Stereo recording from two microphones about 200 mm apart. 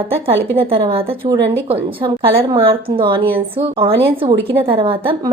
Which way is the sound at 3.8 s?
25° right (ahead or behind).